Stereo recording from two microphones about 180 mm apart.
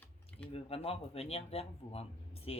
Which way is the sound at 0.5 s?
35° left (ahead or behind).